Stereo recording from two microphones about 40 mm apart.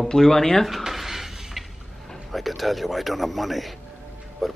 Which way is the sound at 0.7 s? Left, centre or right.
Centre.